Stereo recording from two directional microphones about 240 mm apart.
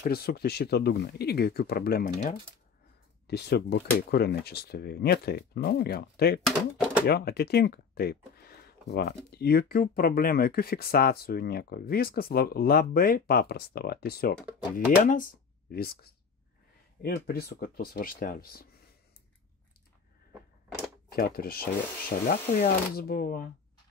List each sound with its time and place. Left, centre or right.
0.0 s speech: left
6.4 s speech: centre
7.1 s speech: left
21.1 s speech: left